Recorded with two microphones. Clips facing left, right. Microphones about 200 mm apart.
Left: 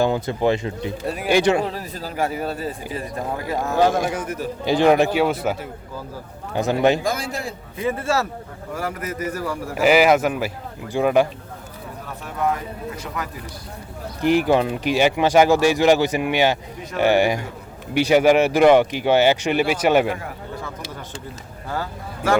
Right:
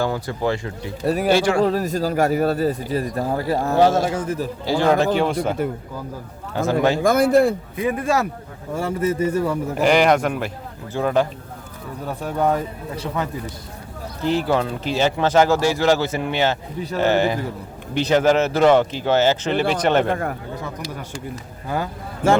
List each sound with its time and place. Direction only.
0.0 s speech: 20° left (ahead or behind)
1.0 s speech: 40° right (ahead or behind)
1.3 s speech: 20° left (ahead or behind)
1.6 s speech: 45° right (ahead or behind); by 4.4 s 30° right (ahead or behind)
4.6 s speech: 20° left (ahead or behind)
6.5 s speech: 15° left (ahead or behind)
7.0 s a man's voice: 55° right (ahead or behind)
7.8 s speech: 15° right (ahead or behind)
9.7 s speech: 5° left (ahead or behind)
12.2 s speech: 30° right (ahead or behind)
14.2 s speech: 15° left (ahead or behind)
21.7 s speech: 20° right (ahead or behind)